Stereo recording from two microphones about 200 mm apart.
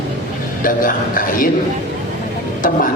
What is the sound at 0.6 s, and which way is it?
Speech, 45° left (ahead or behind).